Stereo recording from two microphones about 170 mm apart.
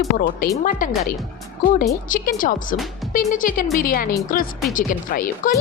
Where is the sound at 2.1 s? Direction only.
50° left (ahead or behind).